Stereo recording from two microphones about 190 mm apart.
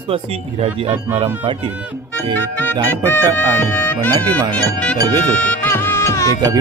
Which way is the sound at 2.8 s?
10° left (ahead or behind).